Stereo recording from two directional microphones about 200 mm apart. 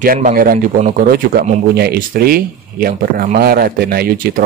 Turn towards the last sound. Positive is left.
turn(degrees=-50)  # may be behind; listen again after turning